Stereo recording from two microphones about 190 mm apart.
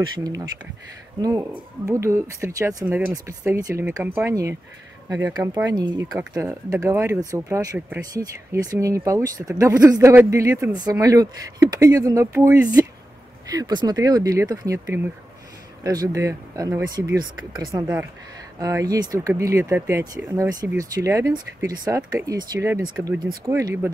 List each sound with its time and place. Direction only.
0.0 s speech: 20° right (ahead or behind)